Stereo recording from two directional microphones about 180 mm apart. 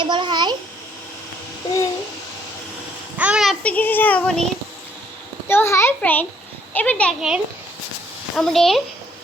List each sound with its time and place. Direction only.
0.0 s a sound: 25° right (ahead or behind)
3.2 s a child's voice: 5° right (ahead or behind)
5.5 s a child's voice: 15° left (ahead or behind)
7.2 s speech: 5° right (ahead or behind)